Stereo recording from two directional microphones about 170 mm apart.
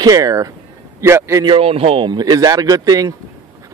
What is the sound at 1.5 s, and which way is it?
Speech, 35° right (ahead or behind).